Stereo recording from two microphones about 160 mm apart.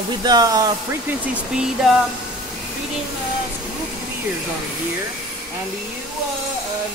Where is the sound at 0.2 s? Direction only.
25° right (ahead or behind).